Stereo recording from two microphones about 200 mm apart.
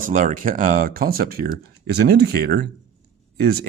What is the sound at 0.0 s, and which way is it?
Speech, 40° right (ahead or behind).